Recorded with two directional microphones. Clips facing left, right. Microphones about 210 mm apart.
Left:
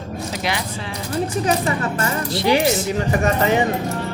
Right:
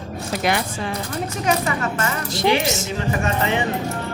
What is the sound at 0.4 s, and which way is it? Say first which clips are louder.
Speech: right 6 dB; 50° right (ahead or behind).